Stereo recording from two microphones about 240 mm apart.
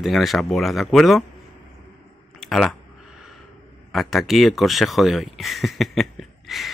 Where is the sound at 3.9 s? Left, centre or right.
Centre.